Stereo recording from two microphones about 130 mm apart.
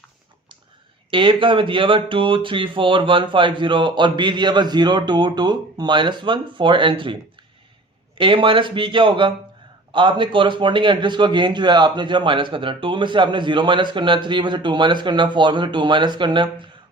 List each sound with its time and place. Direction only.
1.1 s a man's voice: 40° right (ahead or behind)
8.2 s a man's voice: 40° right (ahead or behind)